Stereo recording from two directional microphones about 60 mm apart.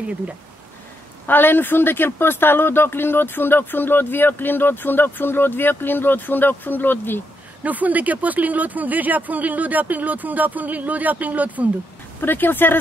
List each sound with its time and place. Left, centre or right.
1.2 s speech: left
7.6 s speech: right
12.2 s speech: left